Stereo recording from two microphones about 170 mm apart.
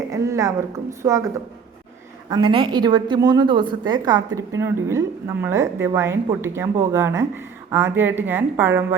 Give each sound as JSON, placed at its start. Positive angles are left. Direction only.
{"t": 0.1, "sound": "speech", "side_deg": -20}
{"t": 2.3, "sound": "a woman's voice", "side_deg": -30}